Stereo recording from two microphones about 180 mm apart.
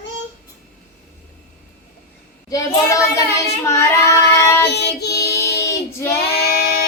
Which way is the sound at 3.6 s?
15° left (ahead or behind).